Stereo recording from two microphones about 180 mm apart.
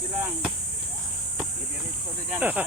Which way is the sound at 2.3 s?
10° right (ahead or behind).